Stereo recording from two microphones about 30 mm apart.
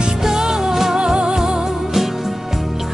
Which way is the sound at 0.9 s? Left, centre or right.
Right.